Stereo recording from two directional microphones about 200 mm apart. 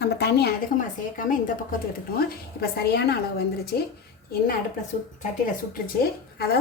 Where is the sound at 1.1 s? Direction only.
45° left (ahead or behind).